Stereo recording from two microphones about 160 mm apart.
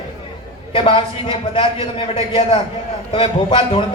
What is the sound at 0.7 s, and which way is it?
A man's voice, 30° left (ahead or behind).